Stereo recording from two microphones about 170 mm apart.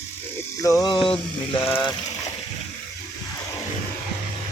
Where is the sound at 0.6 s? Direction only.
20° left (ahead or behind).